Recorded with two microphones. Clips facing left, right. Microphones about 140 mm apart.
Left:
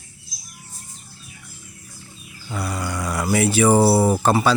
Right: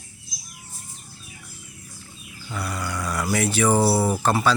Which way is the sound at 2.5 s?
30° left (ahead or behind).